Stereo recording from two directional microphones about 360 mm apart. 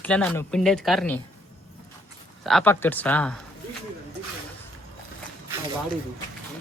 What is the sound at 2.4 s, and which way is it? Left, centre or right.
Speech, centre.